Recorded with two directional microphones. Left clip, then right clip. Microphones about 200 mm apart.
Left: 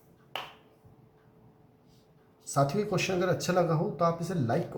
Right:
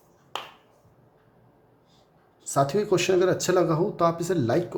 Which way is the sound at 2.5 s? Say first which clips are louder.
Right 6 dB; 45° right (ahead or behind).